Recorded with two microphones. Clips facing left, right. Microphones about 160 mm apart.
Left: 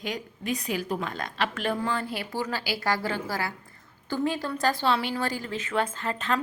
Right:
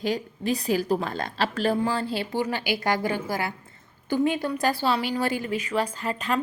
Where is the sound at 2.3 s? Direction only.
20° right (ahead or behind).